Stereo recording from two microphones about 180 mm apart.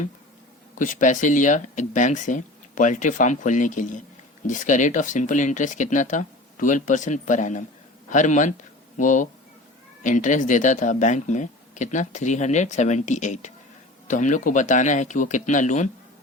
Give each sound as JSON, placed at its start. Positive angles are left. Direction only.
{"t": 0.8, "sound": "speech", "side_deg": 45}